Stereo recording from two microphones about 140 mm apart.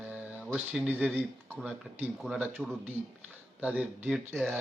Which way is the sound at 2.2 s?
20° right (ahead or behind).